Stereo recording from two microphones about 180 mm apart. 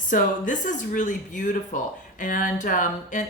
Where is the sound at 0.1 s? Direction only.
45° left (ahead or behind).